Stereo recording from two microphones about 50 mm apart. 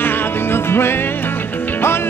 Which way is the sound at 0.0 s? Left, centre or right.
Left.